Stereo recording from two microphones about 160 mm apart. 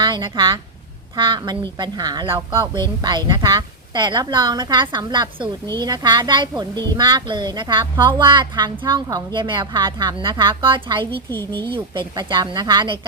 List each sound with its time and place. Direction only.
0.0 s a woman's voice: 30° right (ahead or behind)
11.3 s speech: 10° left (ahead or behind)
11.6 s a woman's voice: 30° right (ahead or behind)